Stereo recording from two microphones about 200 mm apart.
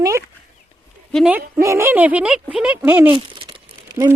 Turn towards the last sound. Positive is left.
turn(degrees=-20)  # may be behind; listen again after turning